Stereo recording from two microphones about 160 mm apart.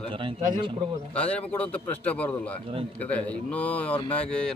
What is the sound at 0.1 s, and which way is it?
Speech, 30° right (ahead or behind).